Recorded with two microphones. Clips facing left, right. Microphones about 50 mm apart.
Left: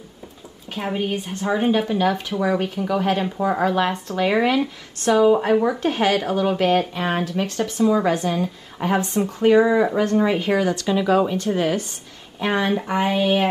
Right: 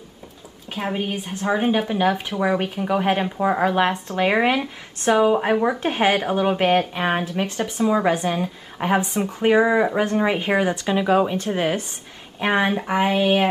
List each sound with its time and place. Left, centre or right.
0.7 s a woman's voice: centre